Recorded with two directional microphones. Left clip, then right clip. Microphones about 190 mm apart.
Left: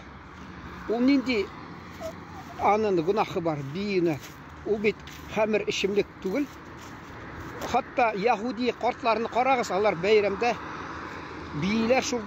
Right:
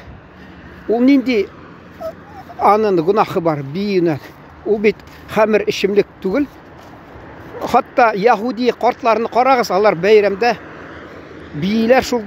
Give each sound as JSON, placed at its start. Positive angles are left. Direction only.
{"t": 0.9, "sound": "speech", "side_deg": -40}
{"t": 2.6, "sound": "speech", "side_deg": -30}
{"t": 7.6, "sound": "speech", "side_deg": -40}
{"t": 11.6, "sound": "speech", "side_deg": -35}